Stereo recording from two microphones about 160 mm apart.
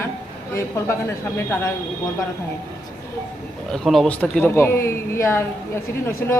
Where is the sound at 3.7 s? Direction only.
Centre (ahead or behind).